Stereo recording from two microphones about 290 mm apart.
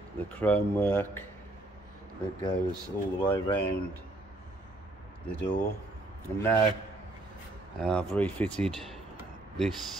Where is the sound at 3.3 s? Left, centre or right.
Centre.